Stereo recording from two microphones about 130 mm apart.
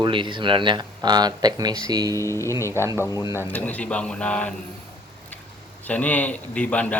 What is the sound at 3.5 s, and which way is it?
Speech, 10° left (ahead or behind).